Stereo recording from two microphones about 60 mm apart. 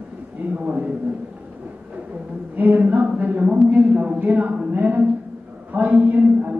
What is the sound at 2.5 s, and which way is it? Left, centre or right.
A woman's voice, right.